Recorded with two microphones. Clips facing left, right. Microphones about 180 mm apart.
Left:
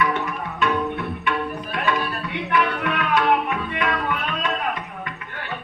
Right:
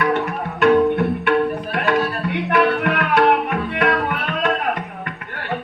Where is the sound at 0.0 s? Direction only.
60° right (ahead or behind).